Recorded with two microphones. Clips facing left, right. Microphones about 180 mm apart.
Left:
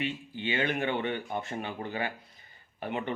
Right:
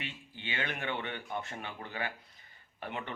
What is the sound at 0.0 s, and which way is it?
Speech, 20° left (ahead or behind).